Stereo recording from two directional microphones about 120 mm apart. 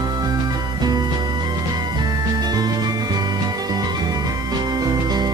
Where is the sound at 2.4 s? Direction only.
35° right (ahead or behind).